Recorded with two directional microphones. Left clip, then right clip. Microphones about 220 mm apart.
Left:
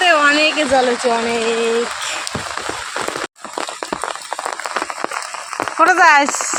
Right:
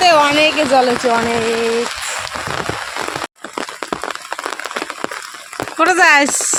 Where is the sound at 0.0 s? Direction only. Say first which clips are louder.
Right 2 dB; 10° right (ahead or behind).